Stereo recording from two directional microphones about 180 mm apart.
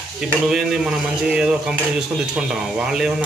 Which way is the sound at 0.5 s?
5° right (ahead or behind).